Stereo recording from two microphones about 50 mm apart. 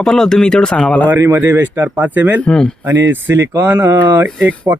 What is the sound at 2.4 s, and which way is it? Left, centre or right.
Speech, centre.